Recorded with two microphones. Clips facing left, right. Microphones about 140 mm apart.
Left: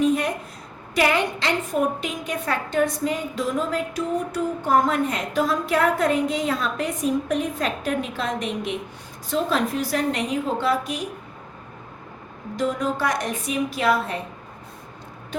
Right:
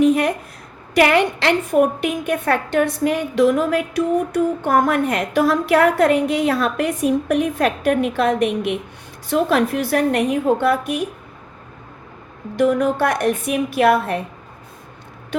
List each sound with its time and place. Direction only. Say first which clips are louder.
0.0 s a sound: right 5 dB; 65° right (ahead or behind)
0.9 s a woman's voice: right 6 dB; 70° right (ahead or behind)
12.5 s a woman's voice: right 8 dB; 60° right (ahead or behind)